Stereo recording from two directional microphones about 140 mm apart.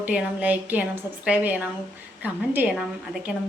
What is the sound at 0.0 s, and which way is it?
A woman's voice, 10° right (ahead or behind).